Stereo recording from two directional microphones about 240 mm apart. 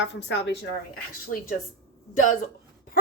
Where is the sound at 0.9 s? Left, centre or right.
Left.